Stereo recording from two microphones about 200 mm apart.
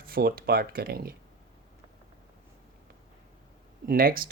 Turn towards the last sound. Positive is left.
turn(degrees=-45)  # may be behind; listen again after turning